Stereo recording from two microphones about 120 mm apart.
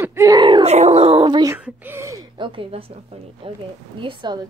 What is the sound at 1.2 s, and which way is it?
Speech, 40° right (ahead or behind).